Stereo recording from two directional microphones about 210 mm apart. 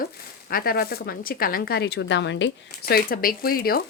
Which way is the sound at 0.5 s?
45° left (ahead or behind).